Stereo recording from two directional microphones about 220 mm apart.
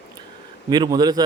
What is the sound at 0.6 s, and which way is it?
Speech, 20° right (ahead or behind).